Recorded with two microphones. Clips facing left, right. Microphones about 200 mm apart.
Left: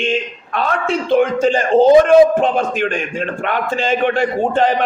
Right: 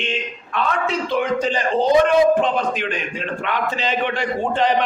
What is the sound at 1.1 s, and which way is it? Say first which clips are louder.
A man's voice: left 8 dB; 45° left (ahead or behind).